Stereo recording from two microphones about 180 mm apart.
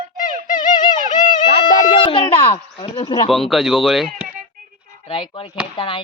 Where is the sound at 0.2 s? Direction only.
45° left (ahead or behind).